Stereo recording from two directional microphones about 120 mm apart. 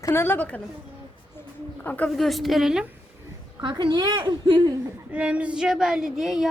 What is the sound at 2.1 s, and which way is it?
Speech, centre (ahead or behind).